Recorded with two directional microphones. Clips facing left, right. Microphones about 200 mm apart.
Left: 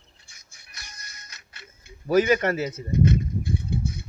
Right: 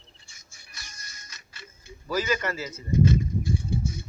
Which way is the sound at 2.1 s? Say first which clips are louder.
Left 8 dB; 60° left (ahead or behind).